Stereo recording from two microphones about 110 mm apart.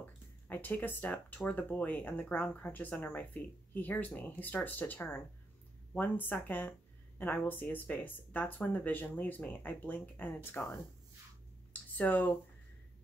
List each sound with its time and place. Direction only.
0.5 s speech: 15° left (ahead or behind)
11.7 s speech: 15° left (ahead or behind)